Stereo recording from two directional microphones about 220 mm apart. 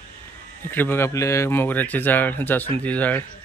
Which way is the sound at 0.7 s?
10° left (ahead or behind).